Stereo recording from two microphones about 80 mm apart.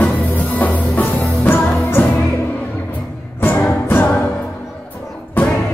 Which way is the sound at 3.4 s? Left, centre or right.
Left.